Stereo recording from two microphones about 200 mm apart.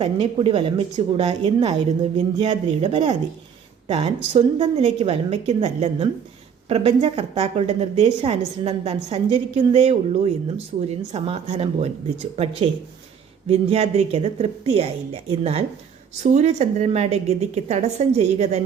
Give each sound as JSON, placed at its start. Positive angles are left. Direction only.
{"t": 0.0, "sound": "a woman's voice", "side_deg": -30}
{"t": 13.5, "sound": "a woman's voice", "side_deg": -30}